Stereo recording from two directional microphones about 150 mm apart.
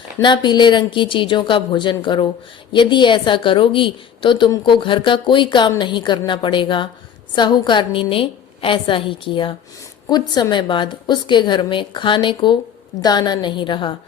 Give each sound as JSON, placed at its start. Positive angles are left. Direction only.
{"t": 0.2, "sound": "a woman's voice", "side_deg": 30}